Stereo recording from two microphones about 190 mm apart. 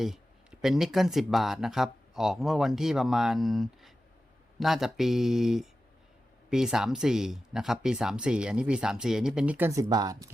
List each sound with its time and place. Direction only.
0.0 s speech: centre (ahead or behind); by 10.3 s 20° right (ahead or behind)